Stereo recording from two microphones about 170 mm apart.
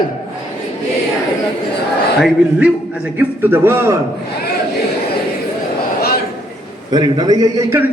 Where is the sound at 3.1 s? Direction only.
10° right (ahead or behind).